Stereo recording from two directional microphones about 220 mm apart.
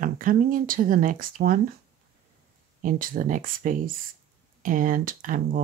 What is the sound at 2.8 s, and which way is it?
Speech, 40° right (ahead or behind).